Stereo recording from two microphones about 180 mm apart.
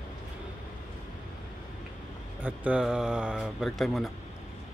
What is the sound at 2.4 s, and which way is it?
Speech, 5° right (ahead or behind).